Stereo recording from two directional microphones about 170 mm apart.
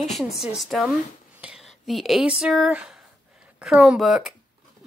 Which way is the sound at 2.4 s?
5° right (ahead or behind).